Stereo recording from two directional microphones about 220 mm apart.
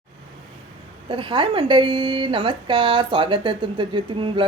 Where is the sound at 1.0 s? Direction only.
25° right (ahead or behind).